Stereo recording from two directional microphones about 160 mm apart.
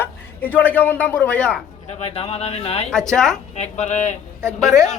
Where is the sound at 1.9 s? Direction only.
40° left (ahead or behind).